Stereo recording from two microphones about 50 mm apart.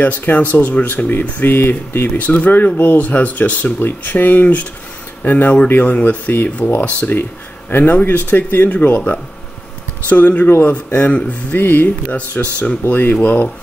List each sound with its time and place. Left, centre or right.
0.0 s speech: left
10.0 s speech: left
11.5 s speech: left
12.4 s speech: left
12.8 s speech: left